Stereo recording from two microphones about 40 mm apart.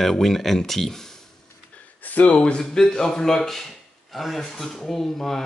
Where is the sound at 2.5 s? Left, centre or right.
Centre.